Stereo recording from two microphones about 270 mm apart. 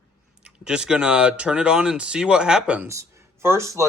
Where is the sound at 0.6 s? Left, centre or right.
Centre.